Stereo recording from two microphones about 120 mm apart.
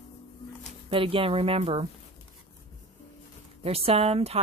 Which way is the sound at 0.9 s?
50° right (ahead or behind).